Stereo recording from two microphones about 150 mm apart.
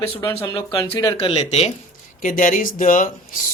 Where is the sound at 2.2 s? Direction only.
60° left (ahead or behind).